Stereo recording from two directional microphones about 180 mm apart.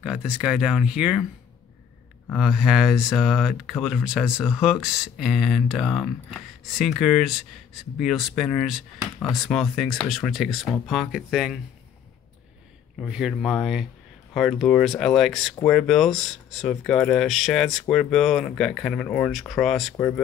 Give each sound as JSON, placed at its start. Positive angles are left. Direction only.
{"t": 0.0, "sound": "speech", "side_deg": -5}
{"t": 2.3, "sound": "speech", "side_deg": 0}
{"t": 13.0, "sound": "speech", "side_deg": 0}